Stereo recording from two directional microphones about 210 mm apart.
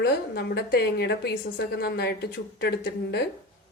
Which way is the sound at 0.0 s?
50° left (ahead or behind).